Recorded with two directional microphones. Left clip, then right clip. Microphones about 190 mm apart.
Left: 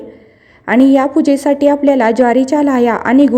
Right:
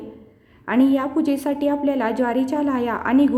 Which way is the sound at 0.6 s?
30° left (ahead or behind).